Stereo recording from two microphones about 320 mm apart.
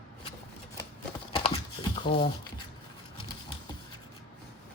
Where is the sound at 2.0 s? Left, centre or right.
Centre.